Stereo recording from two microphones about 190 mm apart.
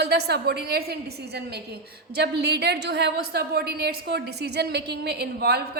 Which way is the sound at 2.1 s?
60° right (ahead or behind).